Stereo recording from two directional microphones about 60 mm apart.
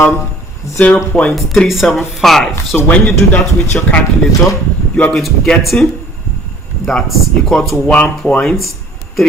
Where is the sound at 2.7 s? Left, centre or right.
Centre.